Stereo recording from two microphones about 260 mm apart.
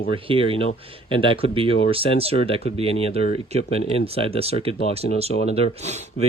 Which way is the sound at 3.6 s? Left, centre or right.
Left.